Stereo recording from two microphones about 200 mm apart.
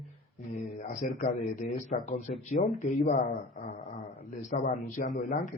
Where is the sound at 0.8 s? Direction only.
40° left (ahead or behind).